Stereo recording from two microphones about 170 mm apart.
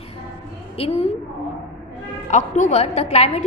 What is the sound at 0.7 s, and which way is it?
Speech, 35° left (ahead or behind).